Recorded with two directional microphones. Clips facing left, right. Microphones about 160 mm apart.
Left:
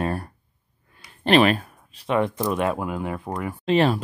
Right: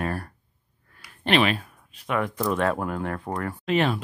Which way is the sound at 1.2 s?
40° left (ahead or behind).